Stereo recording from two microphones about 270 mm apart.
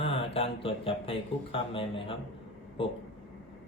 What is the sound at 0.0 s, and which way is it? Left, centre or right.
Mantra, centre.